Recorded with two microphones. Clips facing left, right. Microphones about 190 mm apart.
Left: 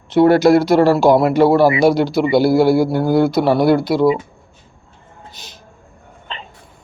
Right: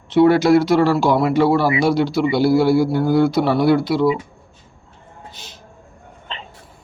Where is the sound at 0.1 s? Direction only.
40° left (ahead or behind).